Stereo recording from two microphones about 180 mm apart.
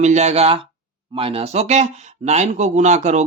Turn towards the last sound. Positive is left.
turn(degrees=-40)  # may be behind; listen again after turning